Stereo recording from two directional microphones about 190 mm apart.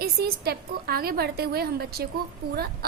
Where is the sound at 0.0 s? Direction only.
55° right (ahead or behind).